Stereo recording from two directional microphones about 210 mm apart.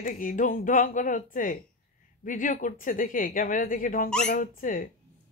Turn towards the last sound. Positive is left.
turn(degrees=40)  # may be behind; listen again after turning